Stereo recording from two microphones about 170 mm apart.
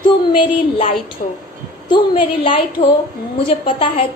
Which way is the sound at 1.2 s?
50° left (ahead or behind).